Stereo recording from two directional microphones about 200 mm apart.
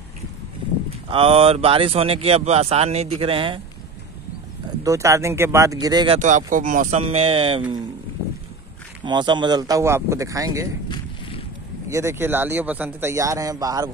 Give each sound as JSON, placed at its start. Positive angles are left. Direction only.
{"t": 0.8, "sound": "speech", "side_deg": -25}
{"t": 4.8, "sound": "speech", "side_deg": -15}
{"t": 6.1, "sound": "speech", "side_deg": -40}
{"t": 9.0, "sound": "speech", "side_deg": -25}
{"t": 11.9, "sound": "speech", "side_deg": -15}